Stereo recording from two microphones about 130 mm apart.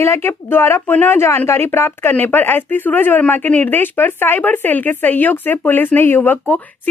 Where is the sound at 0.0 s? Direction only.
20° left (ahead or behind).